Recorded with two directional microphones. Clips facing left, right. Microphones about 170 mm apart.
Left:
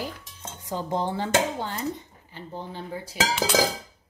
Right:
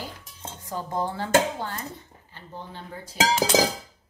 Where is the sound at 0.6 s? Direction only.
25° left (ahead or behind).